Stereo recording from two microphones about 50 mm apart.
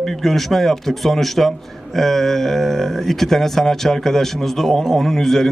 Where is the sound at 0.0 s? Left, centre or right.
Centre.